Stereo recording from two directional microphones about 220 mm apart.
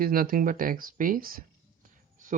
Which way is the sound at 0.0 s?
40° right (ahead or behind).